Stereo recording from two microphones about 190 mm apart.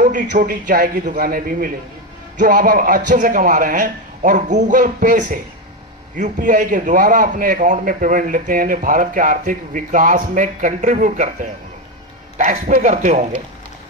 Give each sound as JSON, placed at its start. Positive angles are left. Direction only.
{"t": 0.0, "sound": "a man's voice", "side_deg": -40}
{"t": 12.4, "sound": "speech", "side_deg": -45}